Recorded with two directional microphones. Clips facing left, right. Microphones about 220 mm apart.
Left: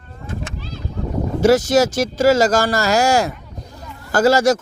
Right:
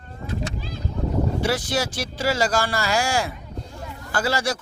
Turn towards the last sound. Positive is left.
turn(degrees=45)  # may be behind; listen again after turning